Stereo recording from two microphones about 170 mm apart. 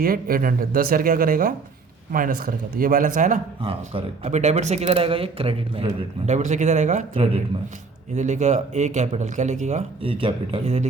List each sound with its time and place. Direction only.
0.0 s a man's voice: 60° right (ahead or behind)
3.6 s a man's voice: 30° right (ahead or behind)